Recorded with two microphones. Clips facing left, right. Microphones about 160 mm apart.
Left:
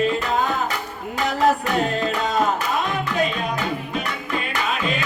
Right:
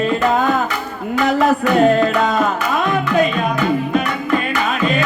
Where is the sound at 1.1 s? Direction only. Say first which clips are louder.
Right 5 dB; 60° right (ahead or behind).